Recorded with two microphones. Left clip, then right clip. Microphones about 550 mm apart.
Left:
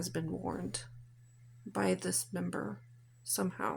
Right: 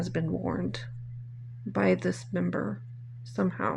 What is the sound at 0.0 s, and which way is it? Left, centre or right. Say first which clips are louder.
Speech: right 6 dB; left.